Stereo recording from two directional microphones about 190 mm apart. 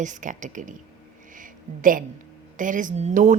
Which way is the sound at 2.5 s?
45° right (ahead or behind).